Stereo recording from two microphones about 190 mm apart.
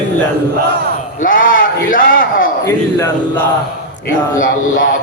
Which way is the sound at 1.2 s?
45° left (ahead or behind).